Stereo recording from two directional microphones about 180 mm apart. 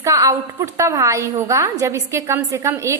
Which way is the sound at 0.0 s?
20° right (ahead or behind).